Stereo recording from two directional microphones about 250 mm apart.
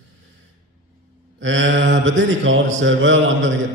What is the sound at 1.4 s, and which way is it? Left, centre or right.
A man's voice, right.